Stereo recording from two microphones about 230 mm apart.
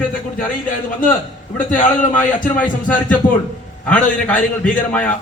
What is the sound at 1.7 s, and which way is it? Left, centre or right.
Speech, left.